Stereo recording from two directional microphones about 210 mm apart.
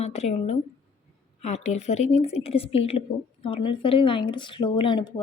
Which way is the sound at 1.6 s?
30° left (ahead or behind).